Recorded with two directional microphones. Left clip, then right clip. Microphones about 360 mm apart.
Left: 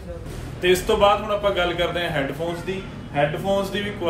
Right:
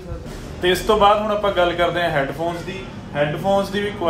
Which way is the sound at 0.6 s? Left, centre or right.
Centre.